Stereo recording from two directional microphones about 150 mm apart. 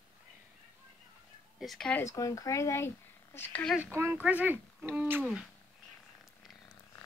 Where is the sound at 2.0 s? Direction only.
20° left (ahead or behind).